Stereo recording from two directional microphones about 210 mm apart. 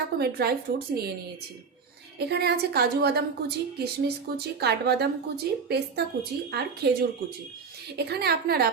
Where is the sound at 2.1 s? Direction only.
50° right (ahead or behind).